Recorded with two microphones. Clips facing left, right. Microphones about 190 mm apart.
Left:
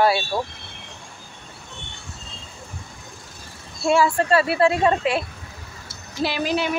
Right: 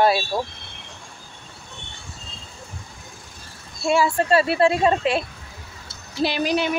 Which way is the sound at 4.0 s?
20° right (ahead or behind).